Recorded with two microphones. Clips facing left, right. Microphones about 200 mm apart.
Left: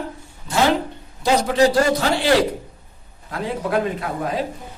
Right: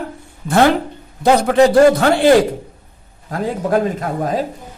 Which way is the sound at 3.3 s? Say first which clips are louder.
Right 5 dB; 45° right (ahead or behind).